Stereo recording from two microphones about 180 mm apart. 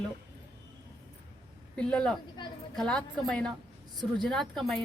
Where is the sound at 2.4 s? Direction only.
25° left (ahead or behind).